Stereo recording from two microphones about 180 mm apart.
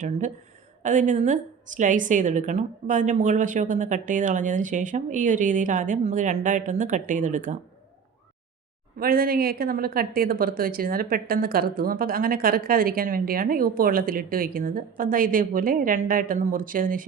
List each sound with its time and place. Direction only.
0.8 s a woman's voice: 45° right (ahead or behind)
9.0 s a woman's voice: 55° right (ahead or behind)